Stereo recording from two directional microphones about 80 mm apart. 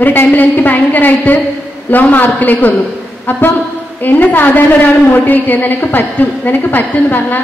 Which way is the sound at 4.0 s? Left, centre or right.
Left.